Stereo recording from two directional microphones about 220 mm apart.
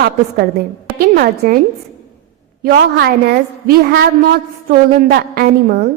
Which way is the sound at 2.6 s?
45° right (ahead or behind).